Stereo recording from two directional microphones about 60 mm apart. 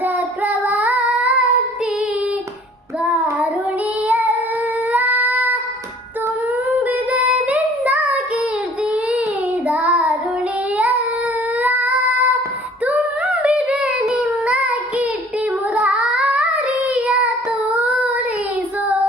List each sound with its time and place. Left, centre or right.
0.0 s child singing: right
4.9 s cat: right
7.1 s child singing: right
9.6 s child singing: right
11.6 s a sound: right
13.4 s yodeling: right
14.1 s child singing: centre